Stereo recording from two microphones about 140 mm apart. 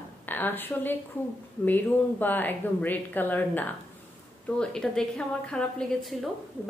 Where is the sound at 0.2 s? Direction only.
15° left (ahead or behind).